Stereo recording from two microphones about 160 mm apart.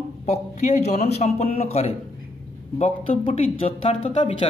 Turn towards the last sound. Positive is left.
turn(degrees=35)  # may be behind; listen again after turning